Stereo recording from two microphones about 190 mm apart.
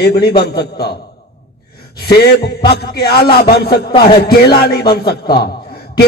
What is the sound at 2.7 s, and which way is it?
A man's voice, 55° left (ahead or behind).